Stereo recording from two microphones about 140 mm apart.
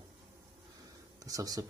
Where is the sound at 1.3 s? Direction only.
25° right (ahead or behind).